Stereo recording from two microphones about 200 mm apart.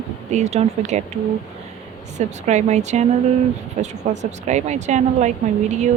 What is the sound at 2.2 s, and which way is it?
A woman's voice, 35° right (ahead or behind).